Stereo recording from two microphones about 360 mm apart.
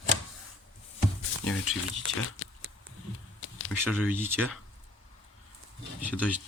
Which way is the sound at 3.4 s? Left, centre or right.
Left.